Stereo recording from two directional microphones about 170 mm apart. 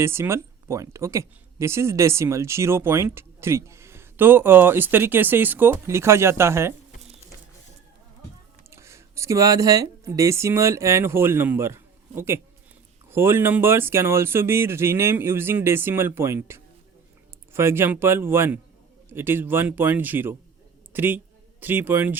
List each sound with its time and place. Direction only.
0.0 s speech: 15° right (ahead or behind)
8.7 s a woman's voice: 15° right (ahead or behind)